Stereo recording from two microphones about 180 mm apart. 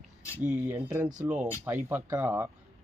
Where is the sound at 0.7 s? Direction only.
10° right (ahead or behind).